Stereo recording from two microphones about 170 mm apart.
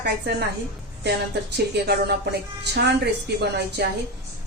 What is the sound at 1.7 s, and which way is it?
A woman's voice, 80° right.